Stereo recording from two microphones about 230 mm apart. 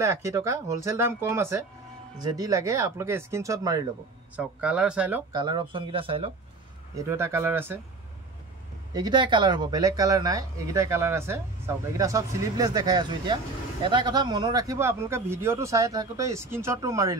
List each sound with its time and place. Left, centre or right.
0.0 s speech: centre
5.3 s speech: centre
7.0 s speech: centre
8.9 s speech: centre